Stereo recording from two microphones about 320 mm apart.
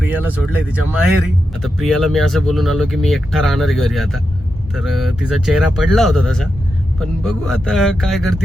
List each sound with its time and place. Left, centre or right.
0.1 s speech: centre